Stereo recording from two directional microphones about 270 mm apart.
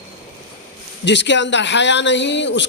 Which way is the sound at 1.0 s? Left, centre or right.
Left.